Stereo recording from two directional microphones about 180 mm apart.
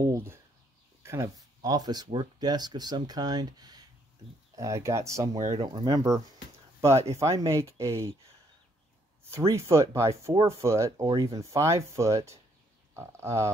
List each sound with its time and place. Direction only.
0.0 s speech: 15° right (ahead or behind)
5.5 s speech: 35° right (ahead or behind)
5.9 s speech: 20° right (ahead or behind)
9.6 s speech: 15° right (ahead or behind)